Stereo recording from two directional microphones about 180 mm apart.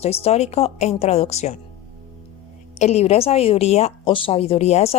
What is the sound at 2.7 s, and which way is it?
A woman's voice, 35° left (ahead or behind).